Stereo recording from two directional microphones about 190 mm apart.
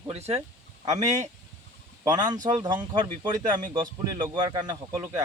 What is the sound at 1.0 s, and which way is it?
Speech, 20° right (ahead or behind).